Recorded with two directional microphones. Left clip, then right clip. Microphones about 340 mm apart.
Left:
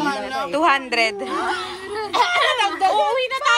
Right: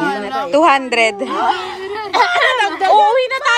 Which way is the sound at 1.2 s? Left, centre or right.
Right.